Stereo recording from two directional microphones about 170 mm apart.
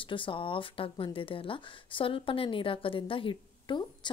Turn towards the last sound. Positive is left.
turn(degrees=30)  # may be behind; listen again after turning